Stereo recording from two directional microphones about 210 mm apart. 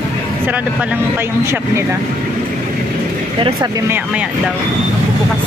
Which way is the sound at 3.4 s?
15° right (ahead or behind).